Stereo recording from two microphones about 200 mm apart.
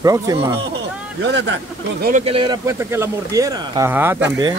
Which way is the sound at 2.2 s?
25° right (ahead or behind).